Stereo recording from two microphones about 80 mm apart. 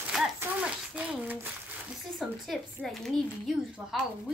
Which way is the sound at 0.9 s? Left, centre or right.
Right.